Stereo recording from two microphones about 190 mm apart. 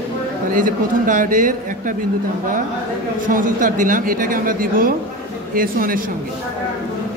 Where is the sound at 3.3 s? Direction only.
45° right (ahead or behind).